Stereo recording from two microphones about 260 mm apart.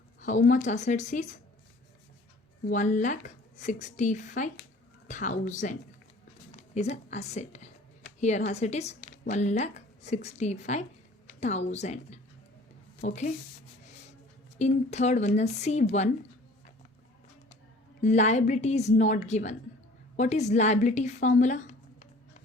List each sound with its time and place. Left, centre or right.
0.2 s speech: left
2.6 s a woman's voice: left
14.6 s speech: left
18.0 s speech: left